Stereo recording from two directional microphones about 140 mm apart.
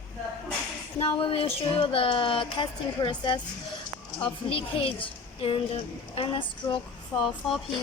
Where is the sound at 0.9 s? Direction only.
40° left (ahead or behind).